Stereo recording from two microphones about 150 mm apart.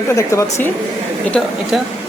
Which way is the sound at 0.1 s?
20° left (ahead or behind).